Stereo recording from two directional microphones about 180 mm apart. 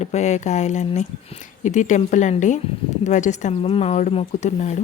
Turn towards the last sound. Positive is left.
turn(degrees=40)  # may be behind; listen again after turning